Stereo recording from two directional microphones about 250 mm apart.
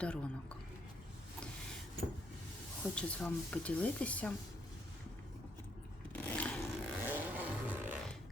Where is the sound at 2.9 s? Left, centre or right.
Centre.